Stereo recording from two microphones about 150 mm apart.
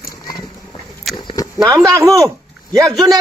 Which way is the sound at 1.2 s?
30° left (ahead or behind).